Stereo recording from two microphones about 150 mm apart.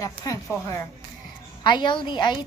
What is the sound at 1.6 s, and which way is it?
Speech, 30° left (ahead or behind).